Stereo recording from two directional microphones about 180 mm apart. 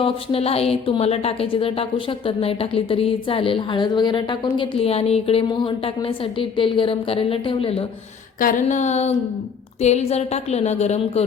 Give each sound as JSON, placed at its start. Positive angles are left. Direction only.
{"t": 0.0, "sound": "a woman's voice", "side_deg": 30}
{"t": 8.4, "sound": "a woman's voice", "side_deg": 50}